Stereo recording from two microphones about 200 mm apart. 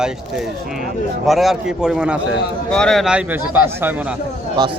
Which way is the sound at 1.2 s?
Centre (ahead or behind).